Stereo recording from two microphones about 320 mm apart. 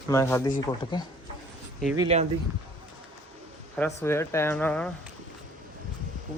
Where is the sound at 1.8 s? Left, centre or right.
Centre.